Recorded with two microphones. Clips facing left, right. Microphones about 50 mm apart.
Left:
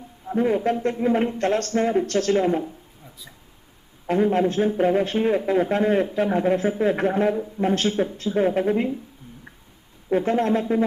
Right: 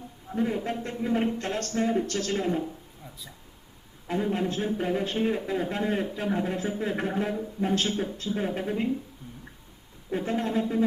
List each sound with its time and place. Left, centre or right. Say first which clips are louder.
0.3 s a man's voice: left 7 dB; left
1.4 s a man's voice: left 7 dB; left
4.1 s a man's voice: left 8 dB; left
10.1 s a man's voice: left 8 dB; left